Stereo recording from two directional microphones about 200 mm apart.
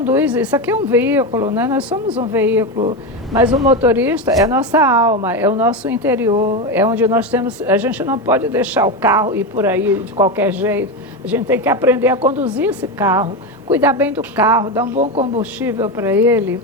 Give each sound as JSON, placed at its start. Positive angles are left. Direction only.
{"t": 0.0, "sound": "speech", "side_deg": -10}
{"t": 14.9, "sound": "speech", "side_deg": -30}
{"t": 15.4, "sound": "speech", "side_deg": -10}